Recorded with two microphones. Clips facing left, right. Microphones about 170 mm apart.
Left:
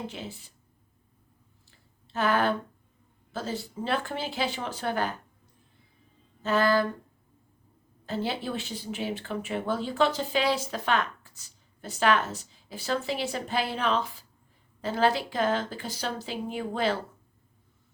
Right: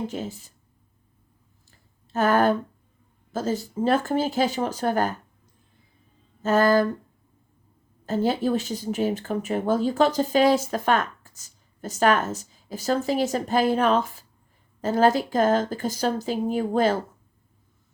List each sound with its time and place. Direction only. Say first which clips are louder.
0.1 s speech: right 8 dB; 45° right (ahead or behind)
2.0 s speech: right 5 dB; 45° right (ahead or behind)
6.4 s speech: right 5 dB; 45° right (ahead or behind)
8.0 s speech: right 8 dB; 45° right (ahead or behind)